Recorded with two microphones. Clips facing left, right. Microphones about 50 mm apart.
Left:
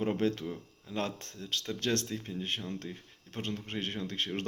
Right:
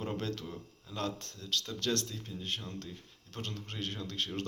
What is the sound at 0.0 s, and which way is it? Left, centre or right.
Speech, left.